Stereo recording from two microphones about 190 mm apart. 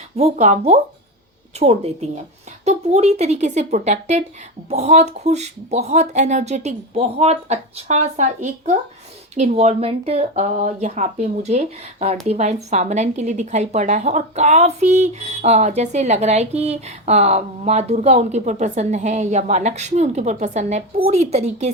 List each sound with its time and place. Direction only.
0.2 s a woman's voice: 35° right (ahead or behind)